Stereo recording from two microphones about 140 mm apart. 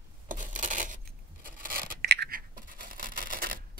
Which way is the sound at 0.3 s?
65° right (ahead or behind).